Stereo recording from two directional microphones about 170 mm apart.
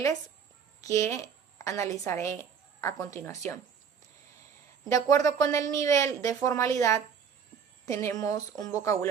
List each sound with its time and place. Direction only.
0.8 s a woman's voice: 20° left (ahead or behind)
4.9 s speech: 20° left (ahead or behind)